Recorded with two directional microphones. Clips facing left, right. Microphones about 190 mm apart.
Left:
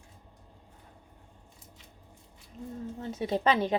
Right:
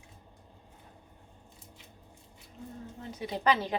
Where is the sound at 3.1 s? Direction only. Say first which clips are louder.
Left 2 dB; 25° left (ahead or behind).